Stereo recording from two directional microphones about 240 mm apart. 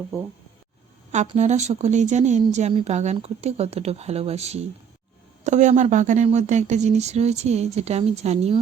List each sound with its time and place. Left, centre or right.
1.1 s speech: right